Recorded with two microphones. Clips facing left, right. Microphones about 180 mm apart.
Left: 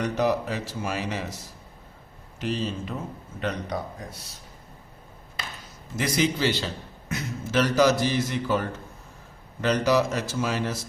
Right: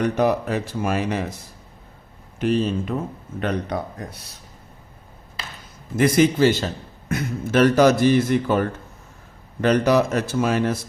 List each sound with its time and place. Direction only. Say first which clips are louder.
0.0 s a man's voice: right 4 dB; 55° right (ahead or behind)
2.4 s a man's voice: right 8 dB; 55° right (ahead or behind)
6.0 s a man's voice: right 8 dB; 55° right (ahead or behind)